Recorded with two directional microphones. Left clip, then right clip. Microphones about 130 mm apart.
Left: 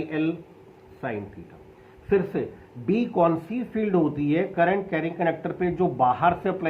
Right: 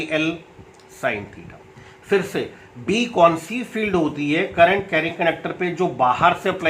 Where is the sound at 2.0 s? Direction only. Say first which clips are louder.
Right 3 dB; 35° right (ahead or behind).